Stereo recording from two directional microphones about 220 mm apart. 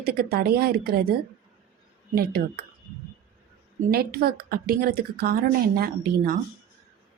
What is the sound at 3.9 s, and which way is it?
A woman's voice, 45° right (ahead or behind).